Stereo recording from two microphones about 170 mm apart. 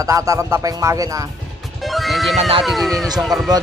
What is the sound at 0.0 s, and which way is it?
Speech, 20° right (ahead or behind).